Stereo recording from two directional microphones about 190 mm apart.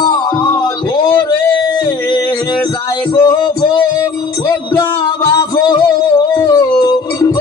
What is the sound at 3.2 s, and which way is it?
Music, 25° left (ahead or behind).